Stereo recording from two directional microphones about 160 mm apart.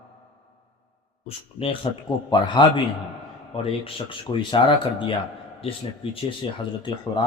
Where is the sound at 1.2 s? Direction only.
35° left (ahead or behind).